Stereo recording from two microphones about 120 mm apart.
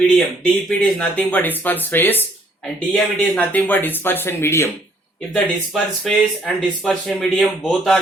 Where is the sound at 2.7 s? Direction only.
5° left (ahead or behind); by 4.7 s 20° left (ahead or behind).